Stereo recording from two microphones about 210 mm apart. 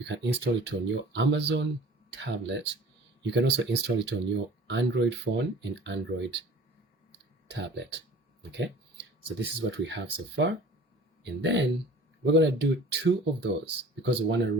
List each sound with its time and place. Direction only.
0.0 s speech: 55° right (ahead or behind)
7.5 s speech: 55° right (ahead or behind)